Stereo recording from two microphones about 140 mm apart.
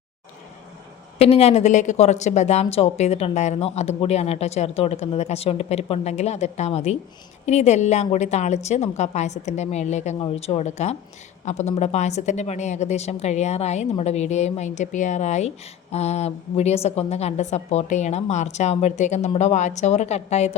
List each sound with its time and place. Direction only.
1.2 s a woman's voice: 45° left (ahead or behind)
10.2 s a woman's voice: 45° left (ahead or behind)